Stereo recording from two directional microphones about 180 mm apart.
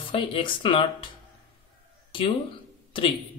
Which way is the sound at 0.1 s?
30° left (ahead or behind).